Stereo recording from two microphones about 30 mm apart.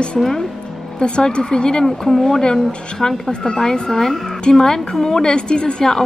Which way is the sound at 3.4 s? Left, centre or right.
Left.